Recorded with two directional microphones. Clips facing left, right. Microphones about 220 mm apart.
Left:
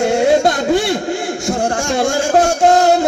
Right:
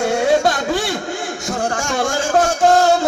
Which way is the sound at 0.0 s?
25° left (ahead or behind).